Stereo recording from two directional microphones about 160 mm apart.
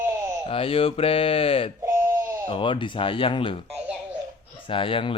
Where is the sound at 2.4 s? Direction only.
35° left (ahead or behind).